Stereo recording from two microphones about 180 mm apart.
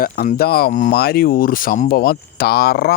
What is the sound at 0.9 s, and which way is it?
Speech, 60° left (ahead or behind).